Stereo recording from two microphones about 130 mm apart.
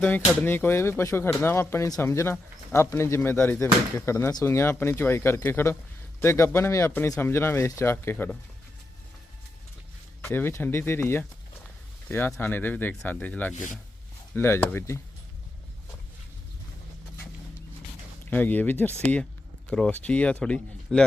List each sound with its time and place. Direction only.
0.0 s speech: 15° left (ahead or behind)
10.2 s speech: 15° left (ahead or behind)
18.3 s speech: 15° left (ahead or behind)